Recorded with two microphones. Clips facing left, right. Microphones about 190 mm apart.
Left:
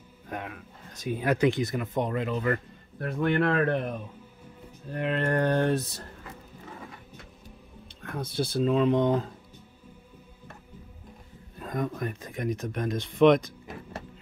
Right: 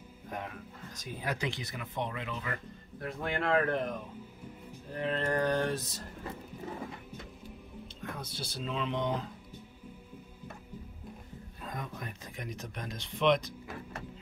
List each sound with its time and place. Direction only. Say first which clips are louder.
0.3 s speech: left 3 dB; 70° left (ahead or behind)
4.9 s mantra: left 4 dB; 65° left (ahead or behind)
8.2 s speech: left 18 dB; 55° left (ahead or behind)
11.6 s speech: left 10 dB; 50° left (ahead or behind)